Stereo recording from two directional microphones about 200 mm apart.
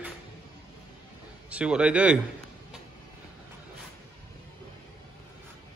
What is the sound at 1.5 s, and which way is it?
Speech, 5° right (ahead or behind).